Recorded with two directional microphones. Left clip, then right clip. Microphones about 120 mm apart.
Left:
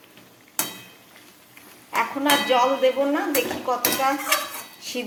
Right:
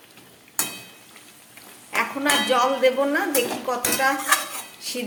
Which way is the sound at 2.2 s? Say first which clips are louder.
Left 1 dB; 25° right (ahead or behind).